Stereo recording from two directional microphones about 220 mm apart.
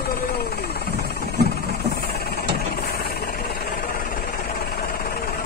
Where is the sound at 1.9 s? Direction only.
45° left (ahead or behind).